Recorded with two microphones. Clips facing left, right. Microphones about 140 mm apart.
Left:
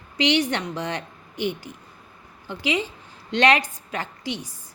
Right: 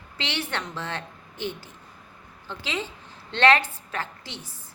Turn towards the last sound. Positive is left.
turn(degrees=15)  # may be behind; listen again after turning